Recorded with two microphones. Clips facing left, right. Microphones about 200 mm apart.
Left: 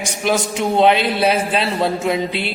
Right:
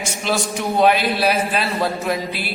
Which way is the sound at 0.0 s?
15° left (ahead or behind).